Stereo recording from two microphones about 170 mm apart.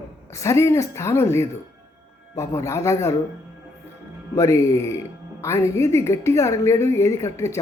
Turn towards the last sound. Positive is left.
turn(degrees=15)  # may be behind; listen again after turning